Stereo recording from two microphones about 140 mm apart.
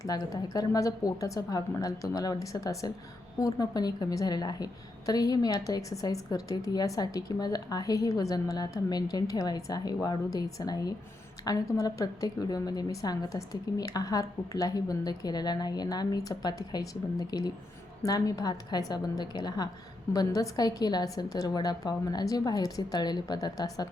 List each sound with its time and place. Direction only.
0.0 s a woman's voice: 25° left (ahead or behind)